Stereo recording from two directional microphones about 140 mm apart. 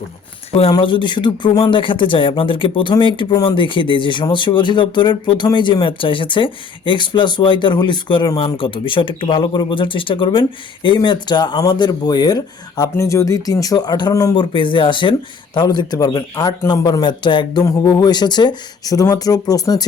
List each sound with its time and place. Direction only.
0.7 s a man's voice: 35° left (ahead or behind)